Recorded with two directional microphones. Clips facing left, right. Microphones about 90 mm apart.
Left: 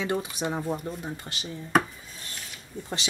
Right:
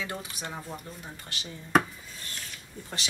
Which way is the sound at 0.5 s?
35° left (ahead or behind).